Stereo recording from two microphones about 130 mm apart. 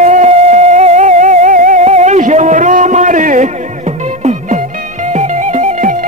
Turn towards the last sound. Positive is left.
turn(degrees=-85)